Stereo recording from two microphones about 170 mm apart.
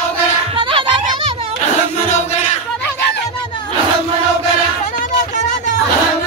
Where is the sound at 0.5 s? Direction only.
30° right (ahead or behind).